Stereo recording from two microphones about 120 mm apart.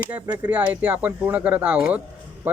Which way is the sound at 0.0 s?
15° right (ahead or behind).